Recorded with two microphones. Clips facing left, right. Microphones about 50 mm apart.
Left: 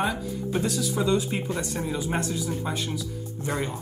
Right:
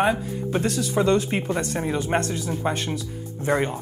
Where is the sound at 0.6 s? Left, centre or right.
Right.